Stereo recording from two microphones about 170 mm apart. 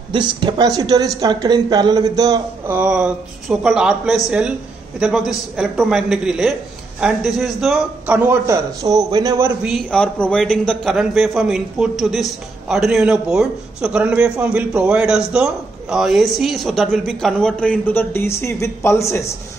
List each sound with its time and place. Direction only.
0.1 s a woman's voice: 25° right (ahead or behind)
2.7 s a man's voice: 5° right (ahead or behind)
8.1 s a woman's voice: 15° right (ahead or behind)
9.6 s a man's voice: 5° right (ahead or behind)
9.8 s a man's voice: 5° left (ahead or behind)